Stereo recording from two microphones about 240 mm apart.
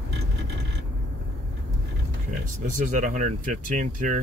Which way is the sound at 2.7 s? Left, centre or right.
Right.